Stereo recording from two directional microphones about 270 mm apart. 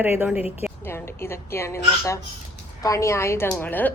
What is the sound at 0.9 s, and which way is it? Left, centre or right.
Speech, centre.